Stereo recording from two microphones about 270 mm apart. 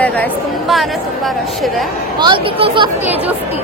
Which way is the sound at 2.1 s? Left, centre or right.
Centre.